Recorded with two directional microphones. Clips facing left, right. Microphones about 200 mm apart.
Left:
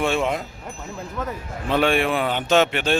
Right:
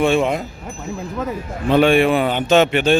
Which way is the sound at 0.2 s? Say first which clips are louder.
Right 4 dB; 10° right (ahead or behind).